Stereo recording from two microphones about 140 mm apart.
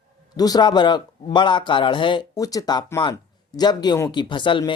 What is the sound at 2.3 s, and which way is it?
Speech, 25° left (ahead or behind).